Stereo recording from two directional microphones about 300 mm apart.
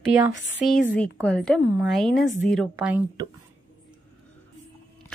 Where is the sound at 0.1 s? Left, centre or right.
Centre.